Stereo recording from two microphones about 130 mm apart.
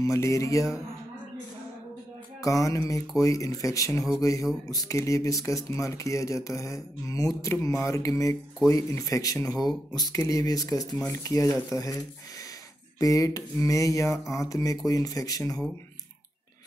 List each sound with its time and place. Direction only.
0.0 s speech: 25° left (ahead or behind)
2.4 s speech: 25° left (ahead or behind)
13.0 s speech: 25° left (ahead or behind)